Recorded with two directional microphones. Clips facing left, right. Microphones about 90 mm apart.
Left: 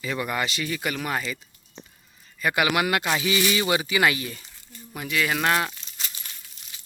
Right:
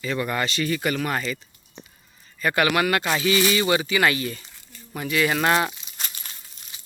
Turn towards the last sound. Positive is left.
turn(degrees=-5)  # may be behind; listen again after turning